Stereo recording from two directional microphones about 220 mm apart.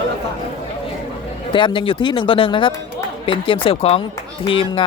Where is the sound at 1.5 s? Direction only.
20° left (ahead or behind).